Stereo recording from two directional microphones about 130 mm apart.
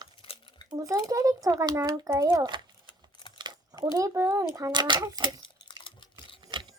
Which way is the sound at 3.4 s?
30° right (ahead or behind).